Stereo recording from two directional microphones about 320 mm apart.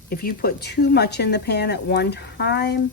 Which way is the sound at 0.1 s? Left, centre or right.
Left.